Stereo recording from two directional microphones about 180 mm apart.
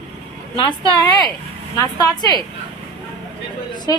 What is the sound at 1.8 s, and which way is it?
Speech, 20° left (ahead or behind).